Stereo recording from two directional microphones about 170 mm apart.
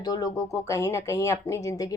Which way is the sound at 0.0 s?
20° left (ahead or behind).